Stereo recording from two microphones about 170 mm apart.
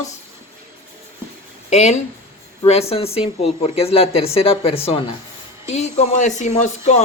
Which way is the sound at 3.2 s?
35° left (ahead or behind).